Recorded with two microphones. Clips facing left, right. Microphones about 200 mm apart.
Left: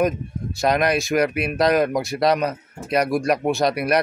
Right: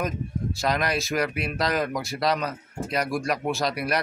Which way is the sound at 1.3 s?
60° left (ahead or behind).